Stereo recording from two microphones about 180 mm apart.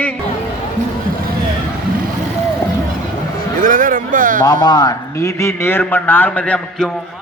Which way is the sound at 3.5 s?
45° right (ahead or behind).